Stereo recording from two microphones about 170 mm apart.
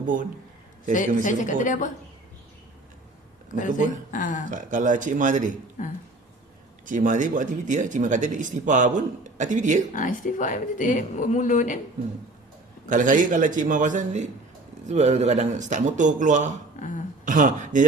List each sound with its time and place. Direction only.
0.0 s a man's voice: 50° right (ahead or behind)
0.9 s speech: 50° left (ahead or behind)
3.5 s speech: 50° left (ahead or behind)
4.5 s speech: 50° right (ahead or behind)
5.8 s speech: 45° left (ahead or behind)
6.8 s speech: 50° right (ahead or behind)
9.9 s speech: 50° left (ahead or behind)
12.9 s speech: 50° right (ahead or behind)